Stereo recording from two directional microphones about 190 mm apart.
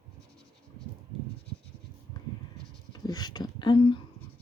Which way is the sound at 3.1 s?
20° left (ahead or behind).